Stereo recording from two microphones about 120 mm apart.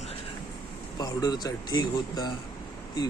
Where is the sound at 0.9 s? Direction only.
35° left (ahead or behind).